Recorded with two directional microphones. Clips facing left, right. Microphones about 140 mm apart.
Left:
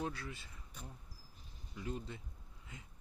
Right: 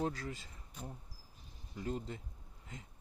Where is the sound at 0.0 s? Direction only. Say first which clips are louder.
Right 4 dB; 40° right (ahead or behind).